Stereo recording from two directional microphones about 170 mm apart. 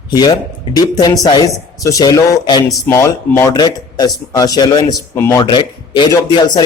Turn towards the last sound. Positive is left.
turn(degrees=25)  # may be behind; listen again after turning